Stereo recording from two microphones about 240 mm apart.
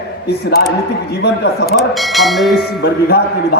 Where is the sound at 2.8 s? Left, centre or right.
Left.